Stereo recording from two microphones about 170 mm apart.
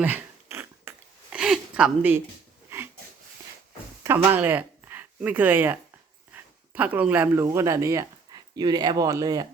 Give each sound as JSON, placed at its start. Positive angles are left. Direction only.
{"t": 0.0, "sound": "a sound", "side_deg": -10}
{"t": 2.6, "sound": "wheeze", "side_deg": -15}
{"t": 4.3, "sound": "speech", "side_deg": -10}